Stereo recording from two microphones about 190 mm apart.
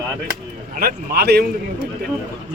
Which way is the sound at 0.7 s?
55° right (ahead or behind).